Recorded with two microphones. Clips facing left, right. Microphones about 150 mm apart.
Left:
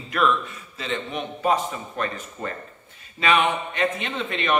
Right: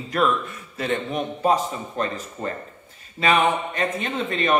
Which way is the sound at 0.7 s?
50° right (ahead or behind).